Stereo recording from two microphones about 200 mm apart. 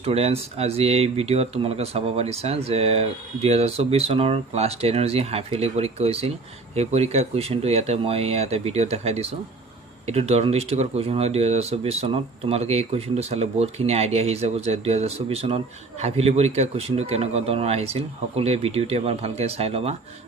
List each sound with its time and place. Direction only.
0.0 s speech: 30° right (ahead or behind)